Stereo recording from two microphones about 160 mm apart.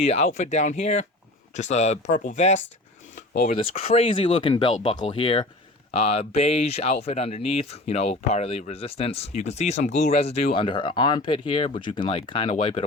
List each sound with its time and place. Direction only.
0.0 s speech: 45° left (ahead or behind)
3.8 s speech: 40° left (ahead or behind)